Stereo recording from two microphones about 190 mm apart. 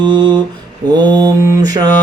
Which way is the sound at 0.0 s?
25° right (ahead or behind).